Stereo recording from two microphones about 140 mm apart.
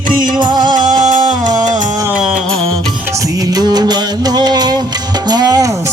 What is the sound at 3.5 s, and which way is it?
Music, 30° right (ahead or behind).